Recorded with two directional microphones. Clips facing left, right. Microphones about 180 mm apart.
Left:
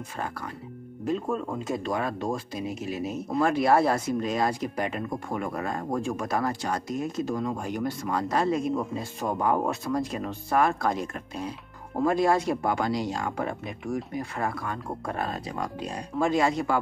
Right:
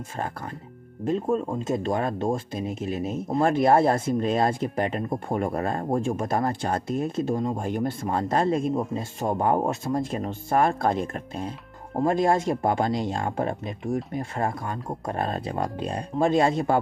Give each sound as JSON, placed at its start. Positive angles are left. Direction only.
{"t": 1.0, "sound": "speech", "side_deg": -30}